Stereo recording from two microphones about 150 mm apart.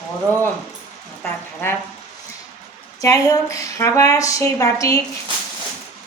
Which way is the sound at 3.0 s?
20° left (ahead or behind).